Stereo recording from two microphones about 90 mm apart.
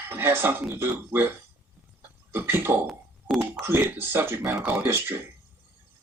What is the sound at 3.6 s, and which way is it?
Speech, 25° right (ahead or behind).